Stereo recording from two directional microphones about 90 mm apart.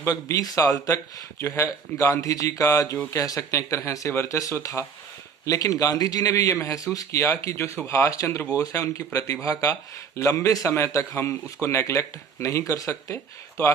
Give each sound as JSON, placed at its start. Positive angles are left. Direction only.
{"t": 0.0, "sound": "a man's voice", "side_deg": 40}